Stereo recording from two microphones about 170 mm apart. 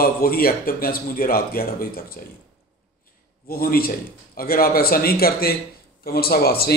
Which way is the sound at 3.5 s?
60° left (ahead or behind).